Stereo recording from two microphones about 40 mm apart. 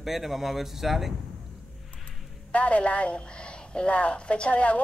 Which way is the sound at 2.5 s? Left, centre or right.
Left.